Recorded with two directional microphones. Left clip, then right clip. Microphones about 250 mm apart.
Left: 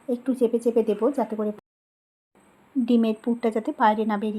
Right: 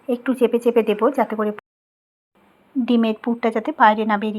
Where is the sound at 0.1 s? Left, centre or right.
Centre.